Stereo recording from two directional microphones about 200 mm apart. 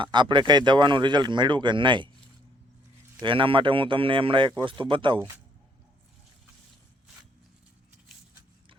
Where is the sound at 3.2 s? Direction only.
25° right (ahead or behind).